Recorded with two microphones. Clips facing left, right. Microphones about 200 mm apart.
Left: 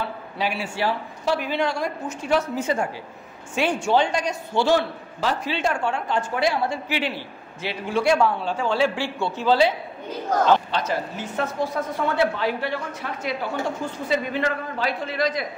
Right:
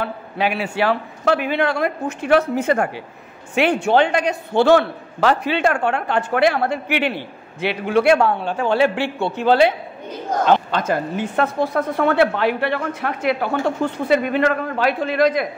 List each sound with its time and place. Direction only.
0.0 s a man's voice: 60° right (ahead or behind)